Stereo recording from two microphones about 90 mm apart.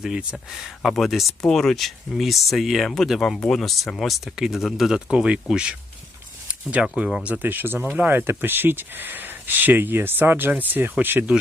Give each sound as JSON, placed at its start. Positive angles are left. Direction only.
{"t": 0.0, "sound": "speech", "side_deg": -10}